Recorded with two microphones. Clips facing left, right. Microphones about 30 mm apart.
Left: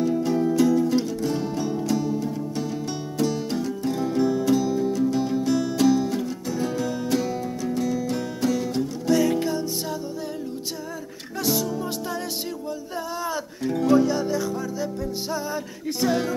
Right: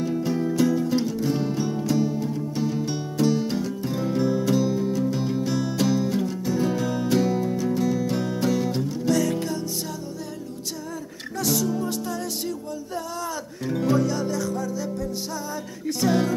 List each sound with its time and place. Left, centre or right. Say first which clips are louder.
0.0 s music: left 3 dB; centre
9.1 s music: left 3 dB; centre
11.4 s music: right 1 dB; centre
13.7 s music: left 2 dB; centre
13.9 s music: left 3 dB; centre
16.0 s speech: right 1 dB; centre